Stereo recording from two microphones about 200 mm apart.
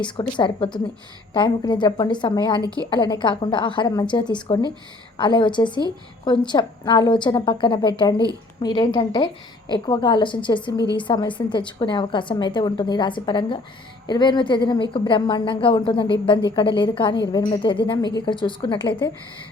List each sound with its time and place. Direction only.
0.0 s a woman's voice: 25° left (ahead or behind)